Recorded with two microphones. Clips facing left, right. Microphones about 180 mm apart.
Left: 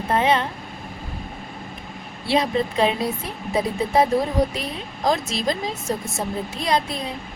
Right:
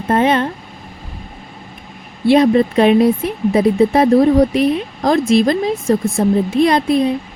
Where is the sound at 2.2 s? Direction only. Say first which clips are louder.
Right 10 dB; 55° right (ahead or behind).